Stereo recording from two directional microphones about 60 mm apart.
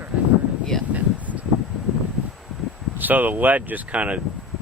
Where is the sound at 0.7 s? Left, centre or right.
Centre.